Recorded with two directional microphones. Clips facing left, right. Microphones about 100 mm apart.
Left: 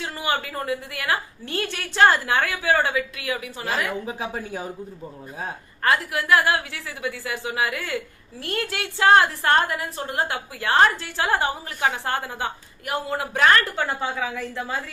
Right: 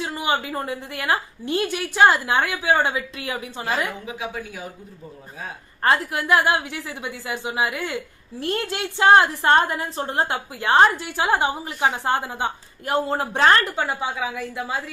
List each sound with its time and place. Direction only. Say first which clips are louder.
0.0 s a woman's voice: right 2 dB; 20° right (ahead or behind)
4.0 s a woman's voice: left 1 dB; 35° left (ahead or behind)
5.8 s a woman's voice: right 2 dB; 25° right (ahead or behind)
13.7 s a woman's voice: right 1 dB; 15° right (ahead or behind)